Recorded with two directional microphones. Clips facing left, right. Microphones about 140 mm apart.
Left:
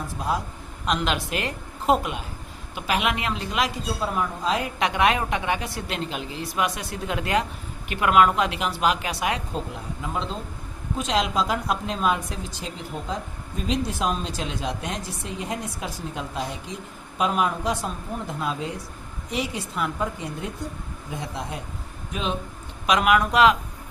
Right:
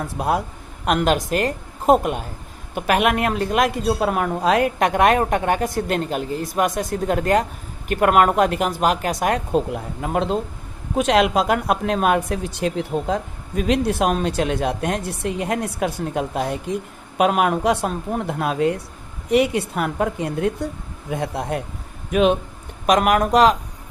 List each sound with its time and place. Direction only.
0.0 s a woman's voice: 60° right (ahead or behind)
22.9 s a woman's voice: 45° right (ahead or behind)